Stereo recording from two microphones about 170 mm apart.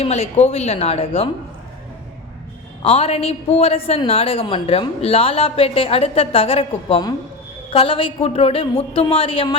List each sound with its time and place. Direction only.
0.0 s a woman's voice: 40° left (ahead or behind)
2.8 s a woman's voice: 35° left (ahead or behind)